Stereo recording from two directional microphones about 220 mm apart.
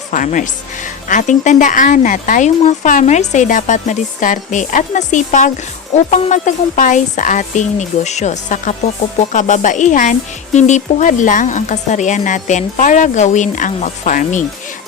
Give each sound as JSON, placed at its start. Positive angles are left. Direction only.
{"t": 0.1, "sound": "speech", "side_deg": 35}